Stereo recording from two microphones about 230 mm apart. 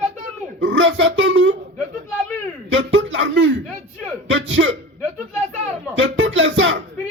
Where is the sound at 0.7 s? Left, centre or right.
Right.